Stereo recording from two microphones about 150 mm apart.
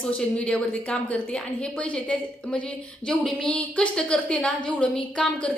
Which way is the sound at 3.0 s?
5° left (ahead or behind).